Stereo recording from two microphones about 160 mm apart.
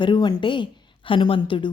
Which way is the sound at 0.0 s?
30° left (ahead or behind).